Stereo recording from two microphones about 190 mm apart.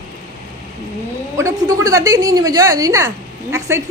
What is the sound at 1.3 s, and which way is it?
A woman's voice, 15° right (ahead or behind).